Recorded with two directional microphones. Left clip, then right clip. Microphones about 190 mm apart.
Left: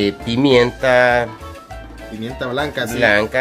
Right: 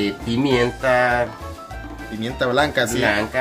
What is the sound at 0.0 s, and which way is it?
Music, 55° left (ahead or behind).